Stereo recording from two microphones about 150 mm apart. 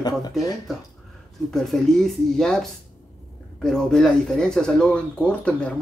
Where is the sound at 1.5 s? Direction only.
5° left (ahead or behind).